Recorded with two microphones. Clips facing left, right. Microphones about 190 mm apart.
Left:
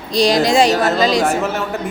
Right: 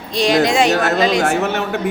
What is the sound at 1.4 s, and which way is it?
Speech, 70° right (ahead or behind).